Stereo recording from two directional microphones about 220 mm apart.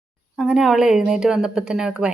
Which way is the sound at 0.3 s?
5° right (ahead or behind).